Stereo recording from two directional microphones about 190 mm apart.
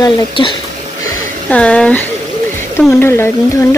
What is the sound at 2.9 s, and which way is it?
Speech, 15° left (ahead or behind).